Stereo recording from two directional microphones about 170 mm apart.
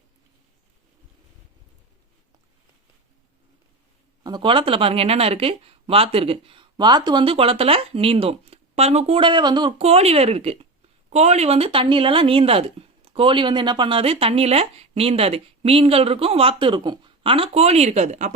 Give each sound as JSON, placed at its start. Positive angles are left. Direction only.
{"t": 4.2, "sound": "speech", "side_deg": -25}